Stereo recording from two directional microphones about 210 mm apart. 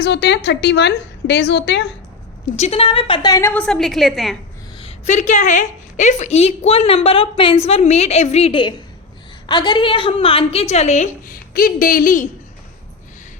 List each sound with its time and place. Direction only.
0.0 s a woman's voice: 55° left (ahead or behind)
2.6 s a woman's voice: 30° left (ahead or behind); by 4.4 s centre (ahead or behind)
4.8 s a woman's voice: 30° left (ahead or behind)